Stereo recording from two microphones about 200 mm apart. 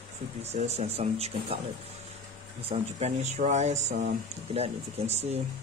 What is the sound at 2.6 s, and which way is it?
Speech, 30° right (ahead or behind).